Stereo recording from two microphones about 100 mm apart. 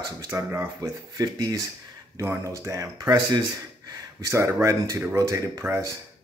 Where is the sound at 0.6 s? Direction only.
40° right (ahead or behind).